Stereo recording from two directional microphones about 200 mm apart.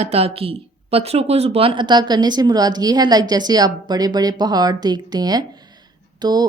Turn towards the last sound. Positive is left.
turn(degrees=-20)  # may be behind; listen again after turning